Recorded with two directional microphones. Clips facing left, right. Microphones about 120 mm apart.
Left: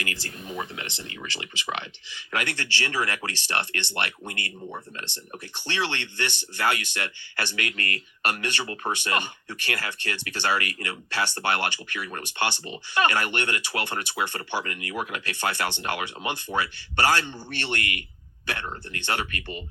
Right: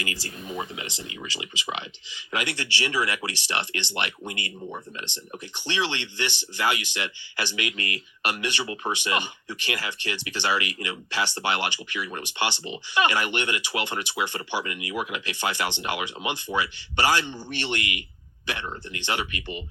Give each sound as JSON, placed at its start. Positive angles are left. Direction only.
{"t": 0.0, "sound": "speech", "side_deg": -15}